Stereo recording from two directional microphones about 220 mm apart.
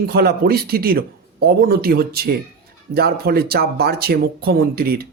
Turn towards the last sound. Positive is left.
turn(degrees=-45)  # may be behind; listen again after turning